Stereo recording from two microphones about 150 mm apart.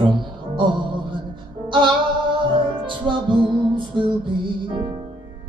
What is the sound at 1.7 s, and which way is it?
Music, 30° right (ahead or behind).